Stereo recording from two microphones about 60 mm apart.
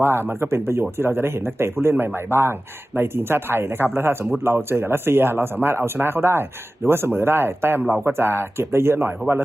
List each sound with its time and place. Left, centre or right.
0.0 s speech: right